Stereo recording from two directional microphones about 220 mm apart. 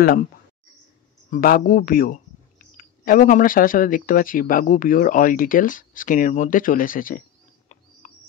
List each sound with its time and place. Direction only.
1.3 s speech: 40° left (ahead or behind)